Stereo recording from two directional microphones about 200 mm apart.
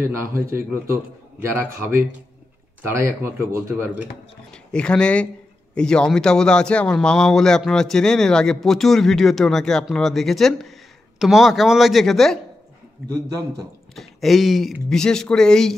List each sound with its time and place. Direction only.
0.0 s a man's voice: 15° right (ahead or behind)
4.5 s a man's voice: 5° left (ahead or behind)
13.9 s a man's voice: centre (ahead or behind)